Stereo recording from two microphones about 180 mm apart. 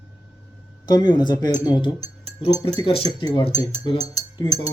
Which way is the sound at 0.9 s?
25° left (ahead or behind).